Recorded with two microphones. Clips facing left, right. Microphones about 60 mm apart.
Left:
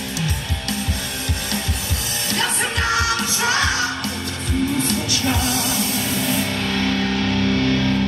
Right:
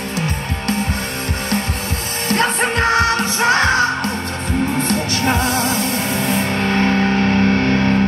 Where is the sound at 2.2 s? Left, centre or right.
Right.